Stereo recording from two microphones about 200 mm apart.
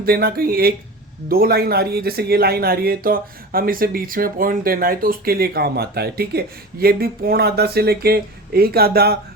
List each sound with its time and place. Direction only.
0.0 s speech: 50° right (ahead or behind)